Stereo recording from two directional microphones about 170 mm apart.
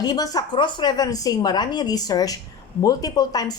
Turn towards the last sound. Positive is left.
turn(degrees=25)  # may be behind; listen again after turning